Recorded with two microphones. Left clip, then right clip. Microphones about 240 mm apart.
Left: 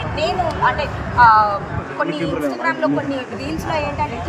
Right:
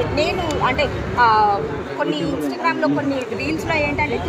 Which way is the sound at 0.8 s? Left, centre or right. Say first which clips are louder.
Left 3 dB; centre.